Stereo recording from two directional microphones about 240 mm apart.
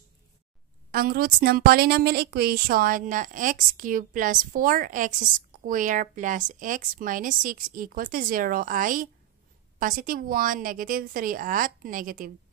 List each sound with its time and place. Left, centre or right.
0.9 s a woman's voice: right